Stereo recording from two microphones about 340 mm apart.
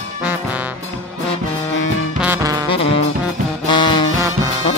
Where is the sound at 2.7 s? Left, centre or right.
Centre.